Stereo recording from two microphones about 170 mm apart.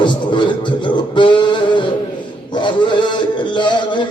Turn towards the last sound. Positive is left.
turn(degrees=25)  # may be behind; listen again after turning